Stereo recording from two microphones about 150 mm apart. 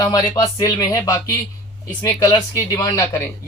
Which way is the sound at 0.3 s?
25° left (ahead or behind).